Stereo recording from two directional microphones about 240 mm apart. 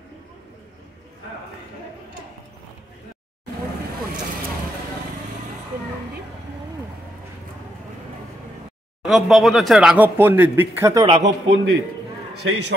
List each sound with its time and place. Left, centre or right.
9.0 s speech: centre
11.2 s a man's voice: right